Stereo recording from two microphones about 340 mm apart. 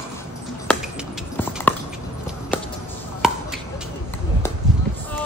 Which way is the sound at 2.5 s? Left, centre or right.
Centre.